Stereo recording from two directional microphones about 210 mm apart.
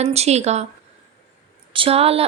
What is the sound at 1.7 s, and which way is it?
Speech, 25° right (ahead or behind).